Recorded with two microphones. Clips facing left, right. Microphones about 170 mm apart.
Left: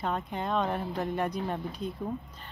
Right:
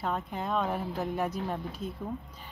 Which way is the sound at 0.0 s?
Centre (ahead or behind).